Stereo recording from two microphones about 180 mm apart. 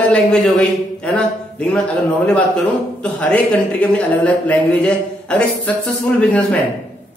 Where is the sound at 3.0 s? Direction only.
5° left (ahead or behind).